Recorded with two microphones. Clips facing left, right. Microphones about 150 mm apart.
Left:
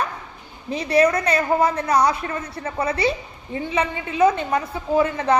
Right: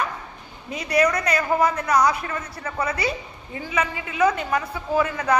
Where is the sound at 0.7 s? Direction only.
30° left (ahead or behind).